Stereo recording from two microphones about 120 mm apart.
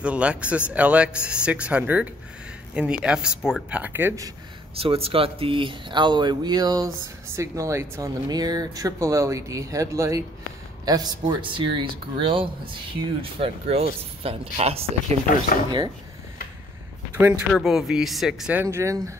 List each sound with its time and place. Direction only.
0.0 s speech: 10° right (ahead or behind)
4.7 s speech: 55° right (ahead or behind); by 8.1 s 25° right (ahead or behind)
8.3 s speech: 35° right (ahead or behind); by 15.1 s 55° right (ahead or behind)
17.5 s speech: centre (ahead or behind)
18.5 s speech: 20° right (ahead or behind)